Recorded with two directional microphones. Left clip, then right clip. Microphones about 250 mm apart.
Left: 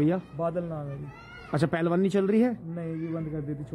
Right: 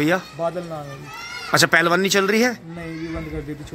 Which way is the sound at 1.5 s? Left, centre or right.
Centre.